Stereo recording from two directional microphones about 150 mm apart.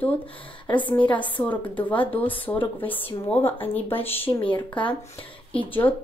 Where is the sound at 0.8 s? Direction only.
30° left (ahead or behind).